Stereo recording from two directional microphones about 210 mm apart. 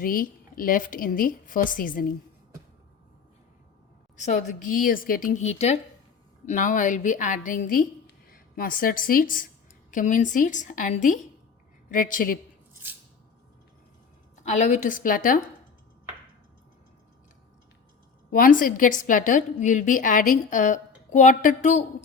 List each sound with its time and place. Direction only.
0.0 s a woman's voice: 45° left (ahead or behind)
4.2 s a woman's voice: 35° left (ahead or behind)
12.8 s a sound: 10° right (ahead or behind)
14.4 s a woman's voice: 35° left (ahead or behind)
18.3 s a woman's voice: 40° left (ahead or behind)